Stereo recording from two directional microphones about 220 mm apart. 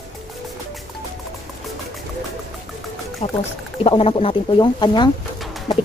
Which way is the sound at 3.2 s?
30° left (ahead or behind).